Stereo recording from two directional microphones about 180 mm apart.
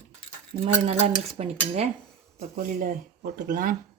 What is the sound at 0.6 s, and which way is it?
Cutlery, 35° right (ahead or behind).